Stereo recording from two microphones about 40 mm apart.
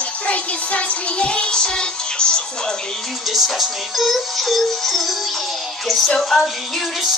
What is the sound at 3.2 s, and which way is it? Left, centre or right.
Music, centre.